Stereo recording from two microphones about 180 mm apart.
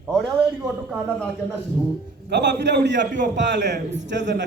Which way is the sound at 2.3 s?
70° right (ahead or behind).